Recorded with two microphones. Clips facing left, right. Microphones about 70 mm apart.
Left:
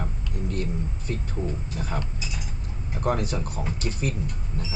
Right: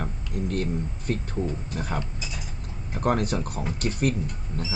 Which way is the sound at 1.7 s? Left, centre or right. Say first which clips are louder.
Right 1 dB; right.